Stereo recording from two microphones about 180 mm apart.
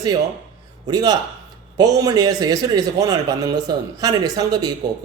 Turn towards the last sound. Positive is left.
turn(degrees=-20)  # may be behind; listen again after turning